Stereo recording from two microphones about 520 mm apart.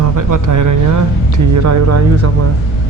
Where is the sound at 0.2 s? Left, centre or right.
Right.